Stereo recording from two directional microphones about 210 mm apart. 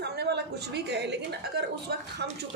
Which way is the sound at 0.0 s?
50° right (ahead or behind).